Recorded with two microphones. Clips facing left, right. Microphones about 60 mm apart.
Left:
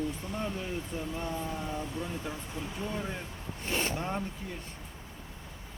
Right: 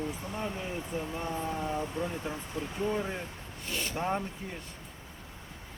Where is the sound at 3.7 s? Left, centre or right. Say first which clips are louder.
Left 4 dB; left.